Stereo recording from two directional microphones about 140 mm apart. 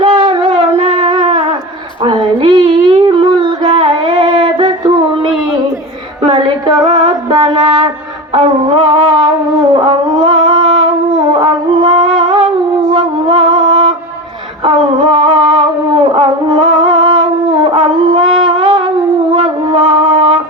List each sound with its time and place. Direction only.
0.0 s a sound: 35° right (ahead or behind)
2.0 s music: 35° right (ahead or behind)
6.2 s music: 40° right (ahead or behind)
8.3 s wind instrument: 40° right (ahead or behind)
11.3 s music: 35° right (ahead or behind)
15.1 s music: 35° right (ahead or behind)